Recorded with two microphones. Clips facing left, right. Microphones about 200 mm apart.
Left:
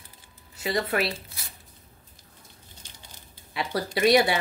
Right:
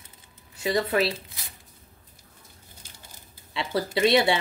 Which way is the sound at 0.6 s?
25° right (ahead or behind).